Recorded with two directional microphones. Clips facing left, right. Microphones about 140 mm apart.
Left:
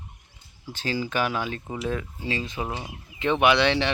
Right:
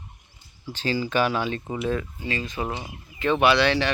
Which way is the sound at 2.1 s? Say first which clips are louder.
Even; 25° left (ahead or behind).